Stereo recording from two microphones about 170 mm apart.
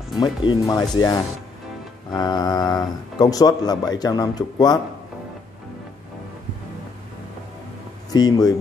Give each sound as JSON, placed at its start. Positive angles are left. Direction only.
{"t": 0.1, "sound": "speech", "side_deg": 25}
{"t": 8.1, "sound": "speech", "side_deg": 25}